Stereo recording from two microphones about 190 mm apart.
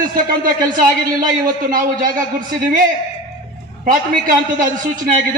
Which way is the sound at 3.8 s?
45° right (ahead or behind).